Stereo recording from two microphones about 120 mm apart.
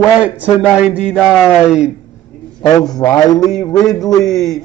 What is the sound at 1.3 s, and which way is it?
Speech, 5° right (ahead or behind).